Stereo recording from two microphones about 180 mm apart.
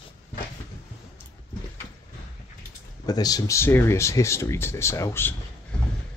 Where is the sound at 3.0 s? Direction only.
20° left (ahead or behind).